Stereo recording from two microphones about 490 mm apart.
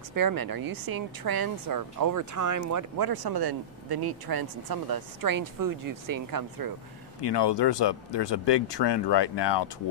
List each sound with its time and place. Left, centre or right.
0.1 s speech: right
7.2 s speech: left